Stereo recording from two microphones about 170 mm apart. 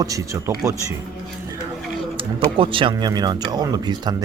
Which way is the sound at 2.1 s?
30° right (ahead or behind).